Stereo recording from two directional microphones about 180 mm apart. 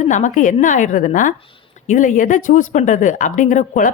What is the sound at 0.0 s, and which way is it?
Speech, 45° left (ahead or behind).